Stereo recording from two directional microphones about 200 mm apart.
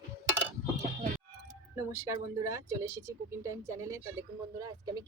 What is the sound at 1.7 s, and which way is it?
Speech, 15° right (ahead or behind).